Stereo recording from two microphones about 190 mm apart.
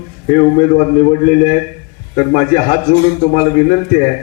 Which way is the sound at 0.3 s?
40° left (ahead or behind).